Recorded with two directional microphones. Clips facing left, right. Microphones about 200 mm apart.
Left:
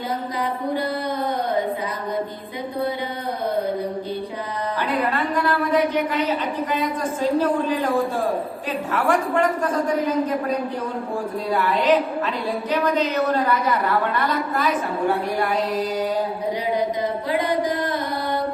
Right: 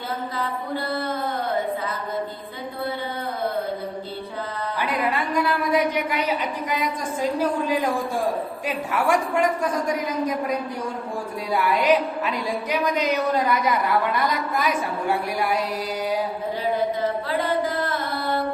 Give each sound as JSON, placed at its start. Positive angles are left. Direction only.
{"t": 5.1, "sound": "a woman's voice", "side_deg": -10}
{"t": 8.9, "sound": "a woman's voice", "side_deg": -10}
{"t": 11.5, "sound": "a woman's voice", "side_deg": -10}
{"t": 17.3, "sound": "mantra", "side_deg": 15}